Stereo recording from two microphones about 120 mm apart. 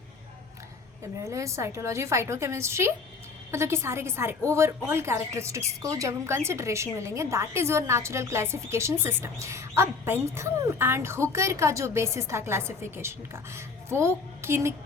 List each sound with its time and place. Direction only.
1.2 s a woman's voice: 25° right (ahead or behind)